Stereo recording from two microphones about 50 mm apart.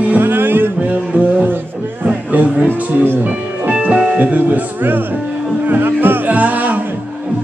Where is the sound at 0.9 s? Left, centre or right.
Right.